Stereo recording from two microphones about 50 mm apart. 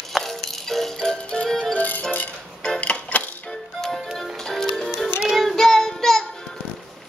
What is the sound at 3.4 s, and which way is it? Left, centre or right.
Music, centre.